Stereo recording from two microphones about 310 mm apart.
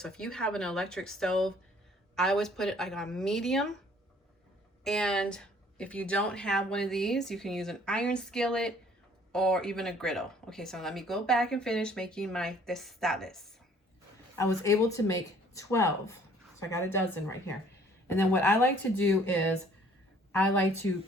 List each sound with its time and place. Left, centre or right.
0.0 s speech: centre
4.8 s speech: centre